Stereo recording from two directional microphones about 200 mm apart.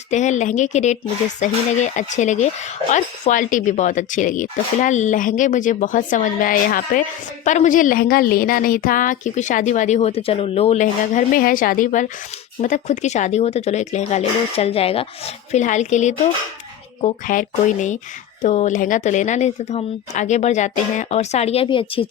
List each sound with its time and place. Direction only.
0.1 s a woman's voice: 35° left (ahead or behind)